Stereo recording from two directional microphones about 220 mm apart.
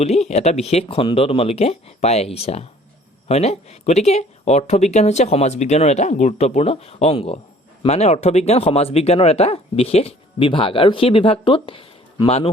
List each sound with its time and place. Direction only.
0.0 s speech: 30° left (ahead or behind)